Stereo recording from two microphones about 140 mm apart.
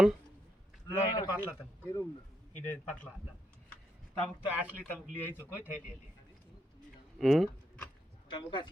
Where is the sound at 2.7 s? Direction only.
10° left (ahead or behind).